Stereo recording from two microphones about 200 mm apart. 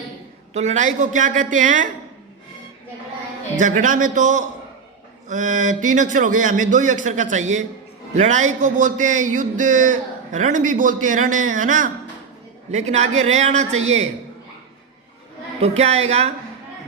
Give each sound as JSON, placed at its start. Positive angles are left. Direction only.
{"t": 0.5, "sound": "a man's voice", "side_deg": -35}
{"t": 3.6, "sound": "a man's voice", "side_deg": -40}
{"t": 15.6, "sound": "a man's voice", "side_deg": -35}